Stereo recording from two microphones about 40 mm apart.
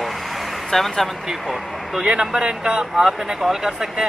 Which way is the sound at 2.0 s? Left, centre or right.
Right.